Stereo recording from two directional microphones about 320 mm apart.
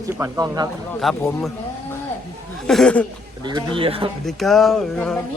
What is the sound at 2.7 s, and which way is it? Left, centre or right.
Speech, centre.